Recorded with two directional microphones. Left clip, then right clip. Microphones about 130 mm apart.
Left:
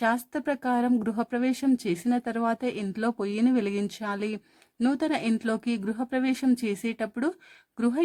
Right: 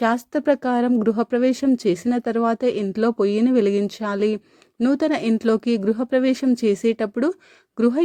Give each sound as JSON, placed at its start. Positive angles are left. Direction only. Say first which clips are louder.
{"t": 0.0, "sound": "speech", "louder": "right 6 dB", "side_deg": -30}